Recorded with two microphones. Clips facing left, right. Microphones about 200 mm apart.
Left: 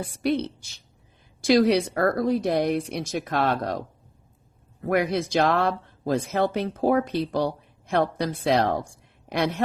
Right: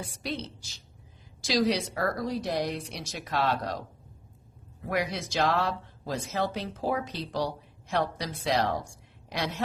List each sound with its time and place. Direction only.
0.0 s speech: 60° left (ahead or behind)
4.9 s speech: 55° left (ahead or behind)